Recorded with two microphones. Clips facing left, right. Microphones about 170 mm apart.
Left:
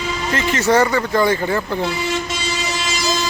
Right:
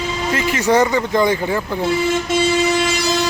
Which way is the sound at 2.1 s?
55° right (ahead or behind).